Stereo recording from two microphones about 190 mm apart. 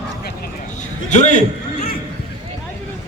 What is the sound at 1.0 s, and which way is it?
Speech, 40° left (ahead or behind).